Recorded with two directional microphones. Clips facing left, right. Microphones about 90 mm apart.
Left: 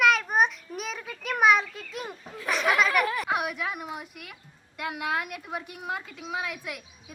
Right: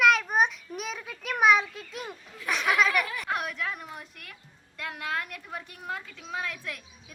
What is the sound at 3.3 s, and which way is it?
A woman's voice, 10° left (ahead or behind).